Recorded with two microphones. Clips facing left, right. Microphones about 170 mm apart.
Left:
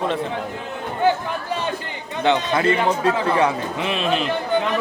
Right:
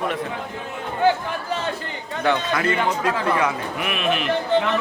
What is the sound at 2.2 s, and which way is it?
Speech, 25° left (ahead or behind).